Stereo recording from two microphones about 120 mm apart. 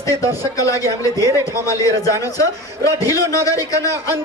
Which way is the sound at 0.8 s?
25° left (ahead or behind).